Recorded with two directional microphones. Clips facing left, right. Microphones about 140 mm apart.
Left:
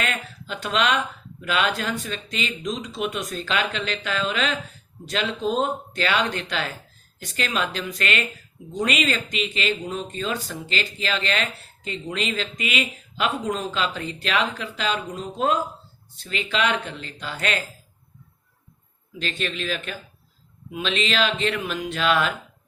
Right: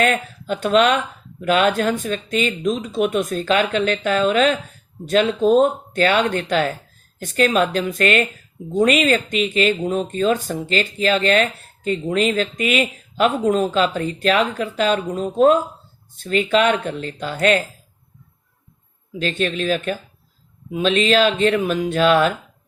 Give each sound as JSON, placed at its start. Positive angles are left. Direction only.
{"t": 0.0, "sound": "speech", "side_deg": -45}
{"t": 19.2, "sound": "speech", "side_deg": -40}